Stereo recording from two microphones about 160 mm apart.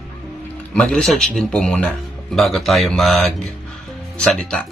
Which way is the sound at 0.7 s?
5° left (ahead or behind).